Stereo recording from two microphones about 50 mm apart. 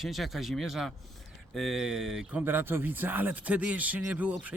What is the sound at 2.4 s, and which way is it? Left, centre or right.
Speech, right.